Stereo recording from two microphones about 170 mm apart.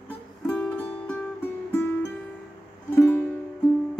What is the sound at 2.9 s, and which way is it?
Music, 15° left (ahead or behind).